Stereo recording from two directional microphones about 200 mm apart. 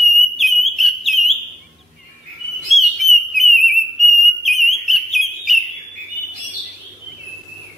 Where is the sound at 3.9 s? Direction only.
Centre (ahead or behind).